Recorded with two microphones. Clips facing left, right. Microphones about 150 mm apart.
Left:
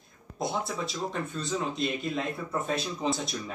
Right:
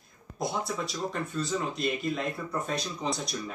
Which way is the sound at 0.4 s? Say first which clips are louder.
Even; centre (ahead or behind).